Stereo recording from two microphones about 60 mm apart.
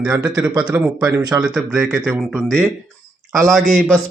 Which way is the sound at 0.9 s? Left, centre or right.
Right.